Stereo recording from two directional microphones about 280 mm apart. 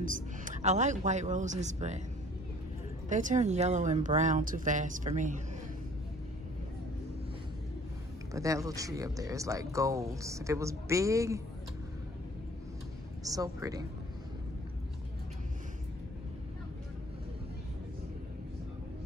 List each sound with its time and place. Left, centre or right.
0.0 s a man's voice: right
3.1 s speech: right
8.3 s speech: centre
13.2 s speech: centre